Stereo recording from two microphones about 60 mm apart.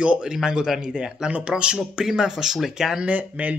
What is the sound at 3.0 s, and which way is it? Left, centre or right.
Speech, right.